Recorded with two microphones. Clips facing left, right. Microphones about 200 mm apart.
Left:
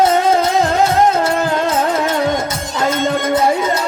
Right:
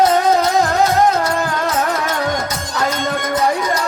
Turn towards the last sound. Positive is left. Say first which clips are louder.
# left 2 dB
turn(degrees=25)  # may be behind; listen again after turning